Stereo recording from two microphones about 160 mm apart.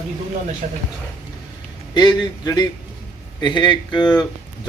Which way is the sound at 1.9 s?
30° left (ahead or behind).